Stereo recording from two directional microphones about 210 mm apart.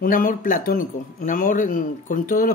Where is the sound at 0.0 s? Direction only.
40° left (ahead or behind).